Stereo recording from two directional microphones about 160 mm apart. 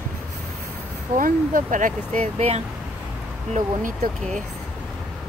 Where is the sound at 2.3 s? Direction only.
40° right (ahead or behind).